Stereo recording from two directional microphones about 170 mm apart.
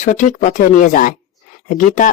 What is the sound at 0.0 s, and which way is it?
Speech, 45° left (ahead or behind).